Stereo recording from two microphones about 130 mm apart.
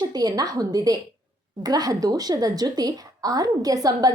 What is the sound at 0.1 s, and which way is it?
A woman's voice, 30° right (ahead or behind).